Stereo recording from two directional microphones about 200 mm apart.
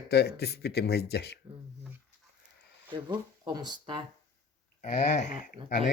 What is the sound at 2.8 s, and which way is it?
Speech, 20° right (ahead or behind).